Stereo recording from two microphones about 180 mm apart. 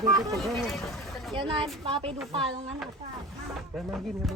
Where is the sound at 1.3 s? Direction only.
30° right (ahead or behind).